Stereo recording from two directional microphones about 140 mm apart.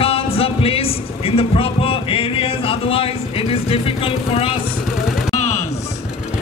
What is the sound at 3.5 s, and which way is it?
Vehicle, 45° left (ahead or behind).